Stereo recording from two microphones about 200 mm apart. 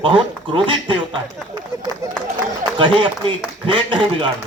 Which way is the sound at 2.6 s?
25° right (ahead or behind).